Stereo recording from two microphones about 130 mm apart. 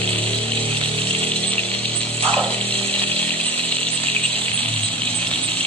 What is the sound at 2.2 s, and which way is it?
Chainsaw, 10° left (ahead or behind).